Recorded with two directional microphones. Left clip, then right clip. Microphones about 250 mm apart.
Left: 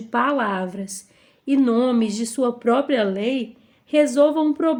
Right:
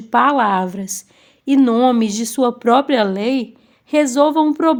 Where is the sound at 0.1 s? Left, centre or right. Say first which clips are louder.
Right 7 dB; right.